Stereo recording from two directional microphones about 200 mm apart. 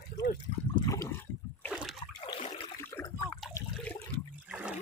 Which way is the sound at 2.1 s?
20° left (ahead or behind).